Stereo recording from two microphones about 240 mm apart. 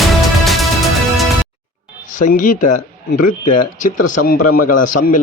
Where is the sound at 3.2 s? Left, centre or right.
Left.